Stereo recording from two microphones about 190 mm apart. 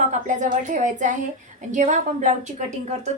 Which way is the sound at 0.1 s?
40° right (ahead or behind).